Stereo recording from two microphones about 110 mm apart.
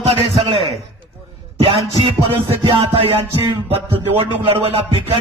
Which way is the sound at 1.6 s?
55° right (ahead or behind).